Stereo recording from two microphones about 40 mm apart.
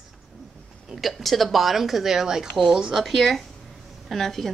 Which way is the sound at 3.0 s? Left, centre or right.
Centre.